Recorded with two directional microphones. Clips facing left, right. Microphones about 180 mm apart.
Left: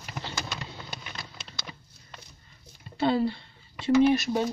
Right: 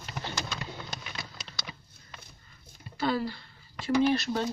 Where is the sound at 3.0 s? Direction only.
25° left (ahead or behind).